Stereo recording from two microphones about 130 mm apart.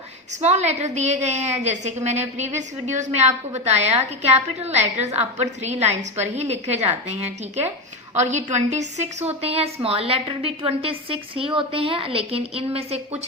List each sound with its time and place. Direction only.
0.4 s a woman's voice: 60° right (ahead or behind)